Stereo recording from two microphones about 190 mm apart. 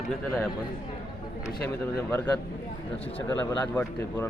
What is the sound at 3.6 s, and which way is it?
Speech, 10° left (ahead or behind).